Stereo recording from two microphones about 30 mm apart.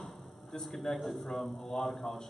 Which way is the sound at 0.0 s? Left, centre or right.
Centre.